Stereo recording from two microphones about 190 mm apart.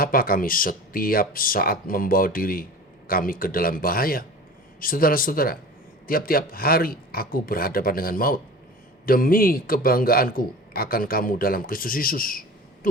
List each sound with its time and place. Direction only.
0.0 s a man's voice: 50° left (ahead or behind)